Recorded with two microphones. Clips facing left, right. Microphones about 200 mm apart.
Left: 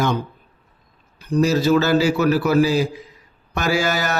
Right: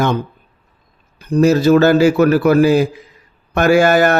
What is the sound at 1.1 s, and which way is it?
Speech, 55° right (ahead or behind).